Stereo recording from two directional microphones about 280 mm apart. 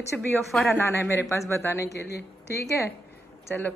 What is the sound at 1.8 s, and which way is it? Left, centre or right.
Speech, left.